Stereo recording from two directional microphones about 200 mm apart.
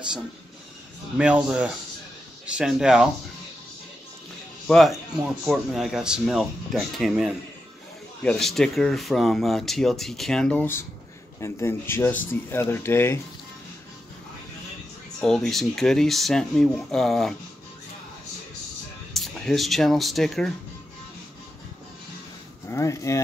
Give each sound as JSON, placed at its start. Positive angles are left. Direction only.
{"t": 1.1, "sound": "speech", "side_deg": -5}
{"t": 4.6, "sound": "speech", "side_deg": 0}
{"t": 15.1, "sound": "speech", "side_deg": 0}
{"t": 19.1, "sound": "speech", "side_deg": 0}
{"t": 22.7, "sound": "speech", "side_deg": 15}